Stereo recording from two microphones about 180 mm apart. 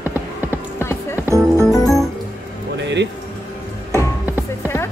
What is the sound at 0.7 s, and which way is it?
Music, 15° left (ahead or behind).